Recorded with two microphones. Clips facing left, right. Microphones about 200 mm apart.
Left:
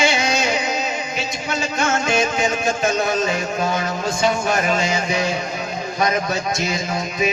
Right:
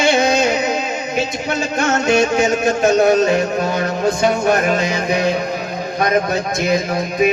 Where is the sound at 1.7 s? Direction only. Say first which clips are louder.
Right 3 dB; 40° right (ahead or behind).